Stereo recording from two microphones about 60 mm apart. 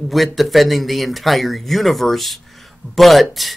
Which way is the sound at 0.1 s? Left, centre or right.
Centre.